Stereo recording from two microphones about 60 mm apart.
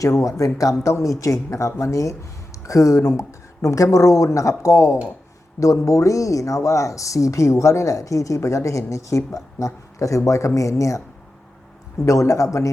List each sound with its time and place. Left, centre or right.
0.0 s speech: left
12.0 s speech: left